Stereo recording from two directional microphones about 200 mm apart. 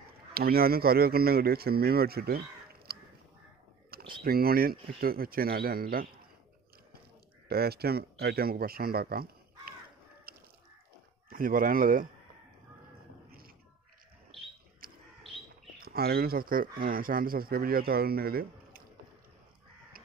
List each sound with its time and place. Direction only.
0.3 s speech: 50° right (ahead or behind)
4.2 s speech: 50° right (ahead or behind)
7.4 s speech: 50° right (ahead or behind)
10.3 s a sound: 50° right (ahead or behind)
11.2 s speech: 45° right (ahead or behind)
14.8 s a sound: 45° right (ahead or behind)
15.8 s speech: 50° right (ahead or behind)